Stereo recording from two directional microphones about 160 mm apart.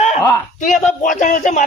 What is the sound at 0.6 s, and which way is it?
Speech, 50° left (ahead or behind).